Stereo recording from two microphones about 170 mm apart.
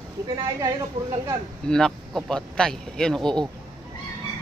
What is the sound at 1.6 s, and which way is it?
Speech, 5° left (ahead or behind).